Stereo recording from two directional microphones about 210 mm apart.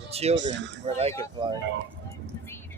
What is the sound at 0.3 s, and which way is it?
Speech, 60° right (ahead or behind).